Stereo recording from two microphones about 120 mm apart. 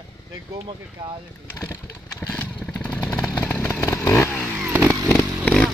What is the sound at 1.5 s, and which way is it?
Motorcycle, 25° left (ahead or behind).